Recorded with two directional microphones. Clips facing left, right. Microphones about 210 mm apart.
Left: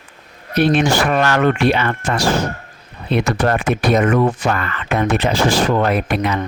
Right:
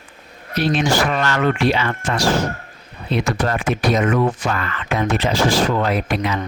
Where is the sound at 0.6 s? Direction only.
60° left (ahead or behind).